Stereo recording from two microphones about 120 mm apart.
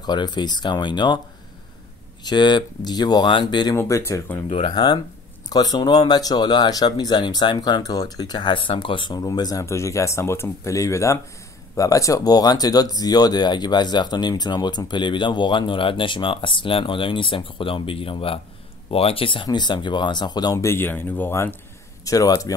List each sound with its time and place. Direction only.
0.0 s speech: 35° left (ahead or behind)
2.2 s speech: 40° left (ahead or behind)
3.7 s speech: 20° left (ahead or behind)
4.5 s speech: 45° left (ahead or behind)
20.5 s speech: 20° left (ahead or behind)